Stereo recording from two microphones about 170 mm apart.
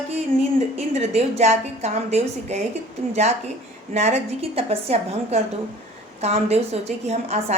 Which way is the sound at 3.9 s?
40° right (ahead or behind).